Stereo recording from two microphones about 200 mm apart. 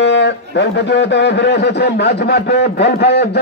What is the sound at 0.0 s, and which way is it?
Speech, 60° left (ahead or behind).